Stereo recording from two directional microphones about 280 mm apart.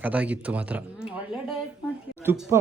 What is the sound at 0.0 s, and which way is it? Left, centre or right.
Speech, centre.